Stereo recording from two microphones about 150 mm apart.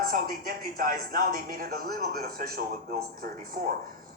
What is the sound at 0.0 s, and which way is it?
A woman's voice, 75° right (ahead or behind).